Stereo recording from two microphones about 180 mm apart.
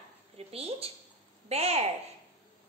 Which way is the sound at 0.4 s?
35° right (ahead or behind).